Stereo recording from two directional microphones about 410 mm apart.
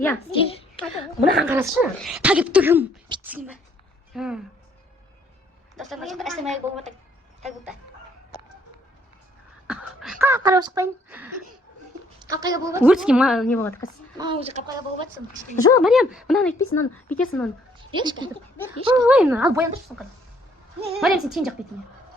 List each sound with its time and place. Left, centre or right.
0.0 s speech: centre
5.7 s speech: centre
9.6 s speech: centre
12.3 s speech: centre
14.2 s speech: centre
15.6 s speech: centre
16.6 s speech: left
17.1 s speech: centre
17.7 s speech: centre